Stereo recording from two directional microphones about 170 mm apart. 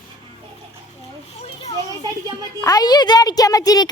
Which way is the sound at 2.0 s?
20° right (ahead or behind).